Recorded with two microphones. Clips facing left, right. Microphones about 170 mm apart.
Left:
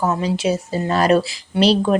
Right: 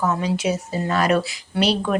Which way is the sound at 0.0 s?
30° left (ahead or behind).